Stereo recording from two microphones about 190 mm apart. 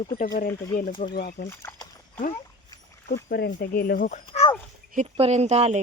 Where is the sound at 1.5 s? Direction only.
15° left (ahead or behind).